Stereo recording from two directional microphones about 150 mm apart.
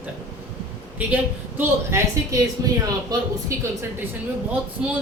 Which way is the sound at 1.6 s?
15° right (ahead or behind).